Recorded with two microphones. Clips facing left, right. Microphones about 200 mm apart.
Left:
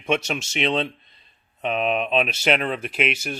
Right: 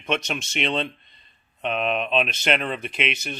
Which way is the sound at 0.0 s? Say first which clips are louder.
Left 3 dB; 5° left (ahead or behind).